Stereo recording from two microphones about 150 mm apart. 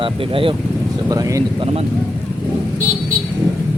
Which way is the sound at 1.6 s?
40° right (ahead or behind).